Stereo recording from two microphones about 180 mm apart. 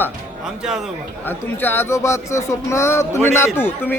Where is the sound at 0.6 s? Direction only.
5° right (ahead or behind).